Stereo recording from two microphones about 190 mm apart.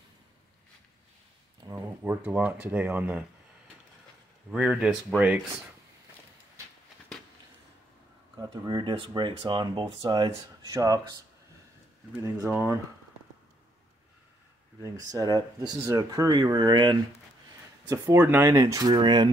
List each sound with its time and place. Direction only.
1.7 s speech: 10° right (ahead or behind)
4.5 s speech: 5° right (ahead or behind)
8.4 s speech: 20° right (ahead or behind)
12.2 s speech: 15° right (ahead or behind)
14.8 s speech: 15° right (ahead or behind)